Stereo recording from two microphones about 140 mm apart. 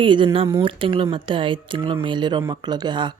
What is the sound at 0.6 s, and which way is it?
Speech, 40° right (ahead or behind).